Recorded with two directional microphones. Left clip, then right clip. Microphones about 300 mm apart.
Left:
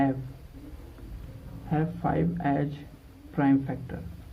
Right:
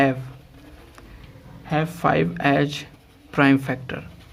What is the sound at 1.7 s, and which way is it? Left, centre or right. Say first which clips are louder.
A man's voice: right 8 dB; right.